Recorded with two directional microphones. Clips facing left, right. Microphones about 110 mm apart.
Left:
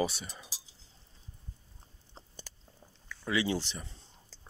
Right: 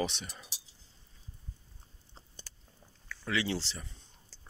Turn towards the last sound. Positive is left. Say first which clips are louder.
# left 2 dB
turn(degrees=20)  # may be behind; listen again after turning